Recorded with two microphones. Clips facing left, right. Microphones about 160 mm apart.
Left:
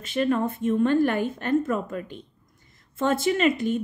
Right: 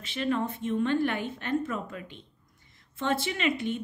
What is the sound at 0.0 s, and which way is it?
A woman's voice, 45° left (ahead or behind).